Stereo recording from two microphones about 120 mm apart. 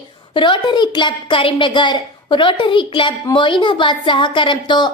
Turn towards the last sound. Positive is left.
turn(degrees=40)  # may be behind; listen again after turning